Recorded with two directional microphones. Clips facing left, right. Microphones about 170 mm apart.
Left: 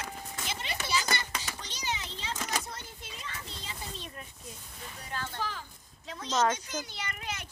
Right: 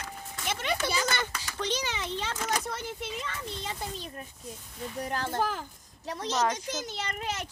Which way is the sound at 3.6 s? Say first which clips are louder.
Right 6 dB; 40° right (ahead or behind).